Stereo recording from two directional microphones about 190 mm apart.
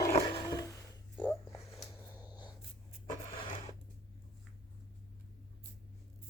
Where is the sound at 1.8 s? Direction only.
10° right (ahead or behind).